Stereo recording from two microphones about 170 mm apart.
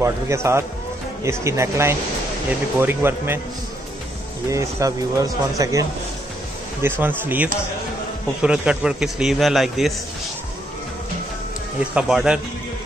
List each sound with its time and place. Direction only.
0.0 s speech: 15° right (ahead or behind)
4.5 s a man's voice: 20° right (ahead or behind); by 9.9 s centre (ahead or behind)
11.9 s a man's voice: 5° right (ahead or behind)